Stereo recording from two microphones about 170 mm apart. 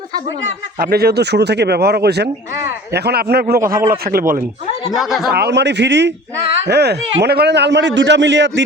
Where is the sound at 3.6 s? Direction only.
55° right (ahead or behind).